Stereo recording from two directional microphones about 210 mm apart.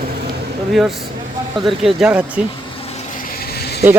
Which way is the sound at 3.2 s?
45° left (ahead or behind).